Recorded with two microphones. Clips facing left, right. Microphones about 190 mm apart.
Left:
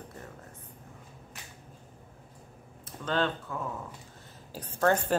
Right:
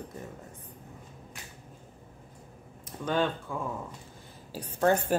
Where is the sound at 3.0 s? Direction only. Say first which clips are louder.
Right 1 dB; 10° right (ahead or behind).